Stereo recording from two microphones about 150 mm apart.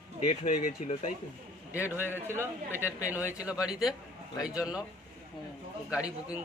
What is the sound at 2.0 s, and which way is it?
A man's voice, 15° right (ahead or behind).